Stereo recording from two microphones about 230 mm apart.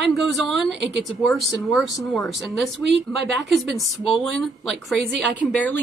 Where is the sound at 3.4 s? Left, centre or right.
Centre.